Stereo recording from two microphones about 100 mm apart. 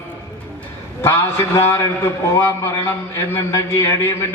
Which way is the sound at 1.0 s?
25° left (ahead or behind).